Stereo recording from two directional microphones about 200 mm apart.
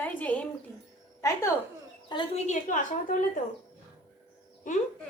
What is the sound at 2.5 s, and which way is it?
Speech, 40° left (ahead or behind).